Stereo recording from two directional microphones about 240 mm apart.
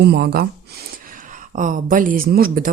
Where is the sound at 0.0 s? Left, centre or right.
Right.